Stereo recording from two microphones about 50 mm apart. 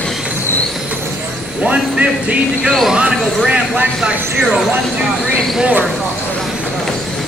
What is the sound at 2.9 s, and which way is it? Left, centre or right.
Speech, centre.